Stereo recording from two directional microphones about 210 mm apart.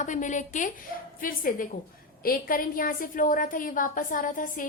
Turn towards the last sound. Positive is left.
turn(degrees=40)  # may be behind; listen again after turning